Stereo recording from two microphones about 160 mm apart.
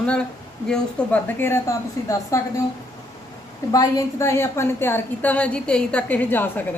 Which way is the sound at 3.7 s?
20° left (ahead or behind).